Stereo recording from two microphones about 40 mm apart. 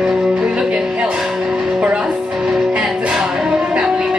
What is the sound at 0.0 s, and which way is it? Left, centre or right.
Music, centre.